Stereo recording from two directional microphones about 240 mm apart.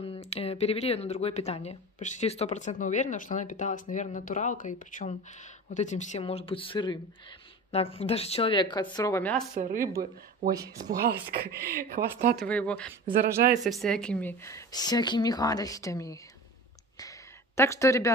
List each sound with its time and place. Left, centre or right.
0.0 s speech: left; by 9.4 s centre
9.6 s speech: right
11.0 s speech: right
12.4 s a woman's voice: centre
17.6 s speech: centre